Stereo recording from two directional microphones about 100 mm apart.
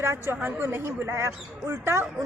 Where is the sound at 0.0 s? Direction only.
25° right (ahead or behind).